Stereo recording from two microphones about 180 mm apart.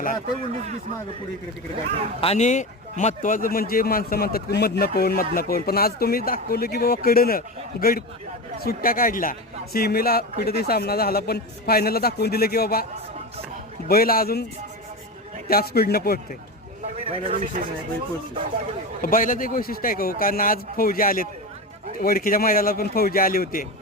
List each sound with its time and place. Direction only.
2.2 s a man's voice: 40° left (ahead or behind); by 12.8 s 60° left (ahead or behind)
13.8 s a man's voice: 55° left (ahead or behind)
15.4 s a man's voice: 60° left (ahead or behind)
16.8 s a sound: 35° right (ahead or behind)
17.2 s speech: 45° right (ahead or behind)
19.0 s speech: 50° left (ahead or behind)